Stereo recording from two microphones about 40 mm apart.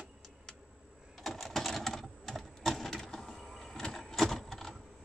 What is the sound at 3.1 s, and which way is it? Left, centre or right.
Vehicle, centre.